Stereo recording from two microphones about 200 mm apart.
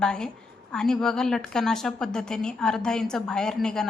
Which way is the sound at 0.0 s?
5° left (ahead or behind).